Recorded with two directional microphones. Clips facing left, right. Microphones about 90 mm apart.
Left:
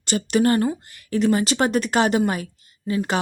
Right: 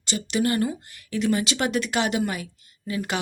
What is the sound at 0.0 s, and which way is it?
Speech, 45° left (ahead or behind).